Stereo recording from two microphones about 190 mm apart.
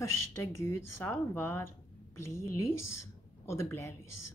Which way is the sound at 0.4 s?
10° left (ahead or behind).